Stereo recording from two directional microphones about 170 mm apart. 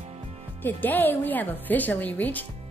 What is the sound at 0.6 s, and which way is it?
A woman's voice, 10° left (ahead or behind).